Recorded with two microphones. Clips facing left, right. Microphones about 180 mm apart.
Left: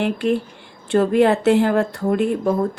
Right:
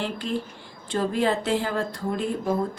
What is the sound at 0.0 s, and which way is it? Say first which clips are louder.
Speech: left 9 dB; 65° left (ahead or behind).